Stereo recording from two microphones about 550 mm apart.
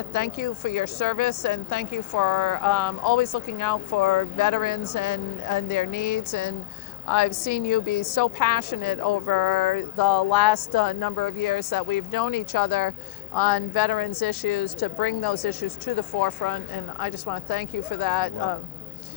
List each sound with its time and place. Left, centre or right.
0.1 s a woman's voice: left